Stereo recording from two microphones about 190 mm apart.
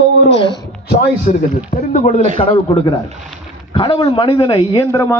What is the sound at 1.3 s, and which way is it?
Speech, 50° left (ahead or behind).